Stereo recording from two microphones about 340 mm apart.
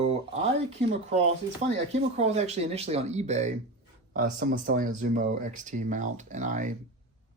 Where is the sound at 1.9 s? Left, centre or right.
Centre.